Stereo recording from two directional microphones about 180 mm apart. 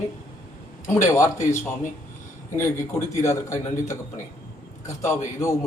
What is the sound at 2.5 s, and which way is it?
A man's voice, 15° left (ahead or behind).